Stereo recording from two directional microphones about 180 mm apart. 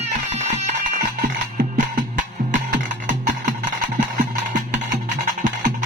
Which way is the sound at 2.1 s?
45° right (ahead or behind).